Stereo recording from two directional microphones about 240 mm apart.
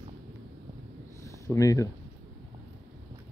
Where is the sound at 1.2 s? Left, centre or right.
Centre.